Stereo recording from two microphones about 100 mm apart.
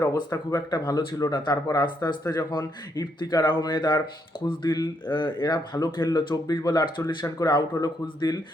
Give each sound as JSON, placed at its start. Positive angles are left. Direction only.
{"t": 0.0, "sound": "a man's voice", "side_deg": 30}